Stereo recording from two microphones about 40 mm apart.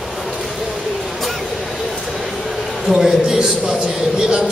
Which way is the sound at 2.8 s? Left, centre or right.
Centre.